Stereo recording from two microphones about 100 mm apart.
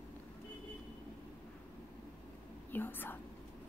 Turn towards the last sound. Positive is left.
turn(degrees=20)  # may be behind; listen again after turning